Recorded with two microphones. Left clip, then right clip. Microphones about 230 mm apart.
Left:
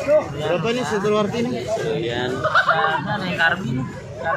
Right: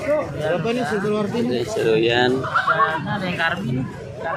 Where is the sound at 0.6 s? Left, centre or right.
Left.